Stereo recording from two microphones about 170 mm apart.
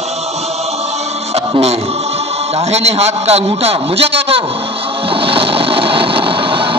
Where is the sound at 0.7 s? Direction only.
40° right (ahead or behind).